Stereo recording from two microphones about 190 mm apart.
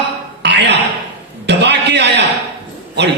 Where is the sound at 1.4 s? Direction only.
65° right (ahead or behind).